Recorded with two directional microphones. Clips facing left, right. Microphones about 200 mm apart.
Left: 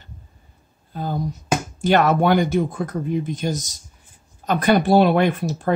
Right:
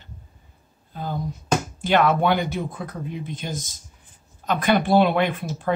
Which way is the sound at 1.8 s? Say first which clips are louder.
Left 3 dB; 40° left (ahead or behind).